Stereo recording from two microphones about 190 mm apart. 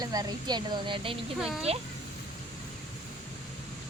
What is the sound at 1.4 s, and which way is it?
Speech, centre (ahead or behind).